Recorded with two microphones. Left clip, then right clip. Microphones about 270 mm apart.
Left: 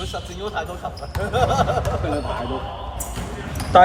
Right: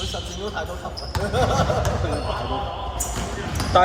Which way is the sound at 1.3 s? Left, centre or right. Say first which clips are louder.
Left 3 dB; left.